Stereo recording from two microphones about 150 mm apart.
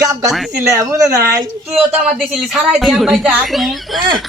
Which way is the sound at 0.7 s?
20° right (ahead or behind).